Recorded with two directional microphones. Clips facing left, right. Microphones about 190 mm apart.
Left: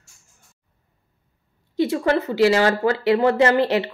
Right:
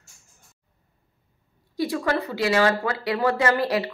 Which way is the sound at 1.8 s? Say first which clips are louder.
Left 5 dB; 20° left (ahead or behind).